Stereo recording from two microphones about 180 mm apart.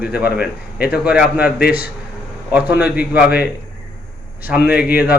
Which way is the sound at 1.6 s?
60° left (ahead or behind).